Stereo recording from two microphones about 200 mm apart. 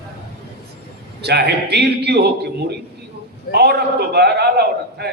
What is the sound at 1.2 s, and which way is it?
A man's voice, 55° right (ahead or behind).